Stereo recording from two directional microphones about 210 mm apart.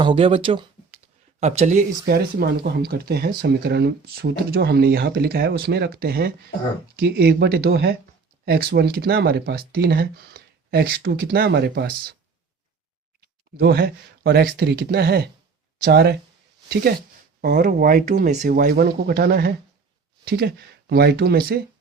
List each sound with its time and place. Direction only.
0.0 s speech: 25° right (ahead or behind); by 12.1 s 50° right (ahead or behind)
13.6 s speech: 50° right (ahead or behind)
17.4 s speech: 45° right (ahead or behind)